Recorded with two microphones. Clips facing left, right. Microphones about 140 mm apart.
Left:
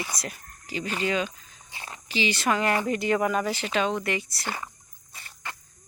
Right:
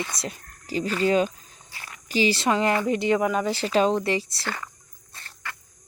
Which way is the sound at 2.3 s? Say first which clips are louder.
Right 2 dB; 25° right (ahead or behind).